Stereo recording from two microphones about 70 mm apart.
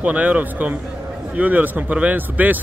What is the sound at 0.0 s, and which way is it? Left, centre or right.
A man's voice, centre.